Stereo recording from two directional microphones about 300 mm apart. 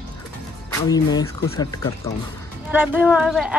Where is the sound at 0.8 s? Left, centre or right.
Centre.